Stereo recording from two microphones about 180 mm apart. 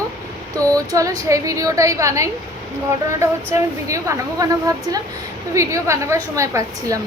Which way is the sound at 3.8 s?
15° right (ahead or behind).